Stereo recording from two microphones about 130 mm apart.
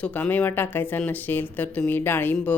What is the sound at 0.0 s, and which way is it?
Speech, 10° left (ahead or behind).